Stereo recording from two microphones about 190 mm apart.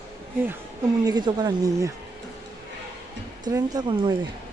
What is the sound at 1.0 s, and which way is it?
Speech, 20° right (ahead or behind).